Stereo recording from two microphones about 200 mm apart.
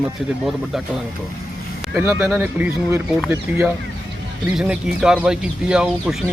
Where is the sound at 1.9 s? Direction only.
15° right (ahead or behind).